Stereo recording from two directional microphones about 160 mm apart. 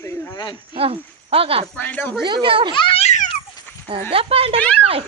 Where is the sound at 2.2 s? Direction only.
30° right (ahead or behind).